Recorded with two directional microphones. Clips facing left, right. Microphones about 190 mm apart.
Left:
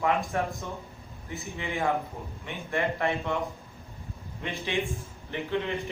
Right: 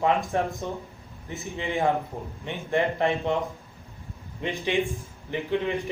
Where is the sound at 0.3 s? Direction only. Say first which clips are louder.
Right 3 dB; 25° right (ahead or behind).